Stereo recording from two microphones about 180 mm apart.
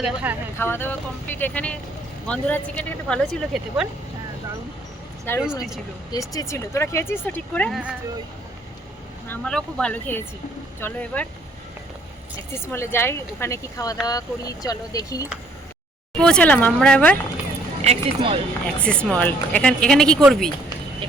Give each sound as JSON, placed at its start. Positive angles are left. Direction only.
{"t": 0.0, "sound": "speech", "side_deg": -5}
{"t": 0.6, "sound": "speech", "side_deg": 10}
{"t": 5.3, "sound": "speech", "side_deg": 10}
{"t": 9.3, "sound": "speech", "side_deg": 5}
{"t": 12.5, "sound": "speech", "side_deg": 15}
{"t": 16.1, "sound": "speech", "side_deg": 5}
{"t": 17.8, "sound": "speech", "side_deg": -30}
{"t": 18.6, "sound": "speech", "side_deg": 5}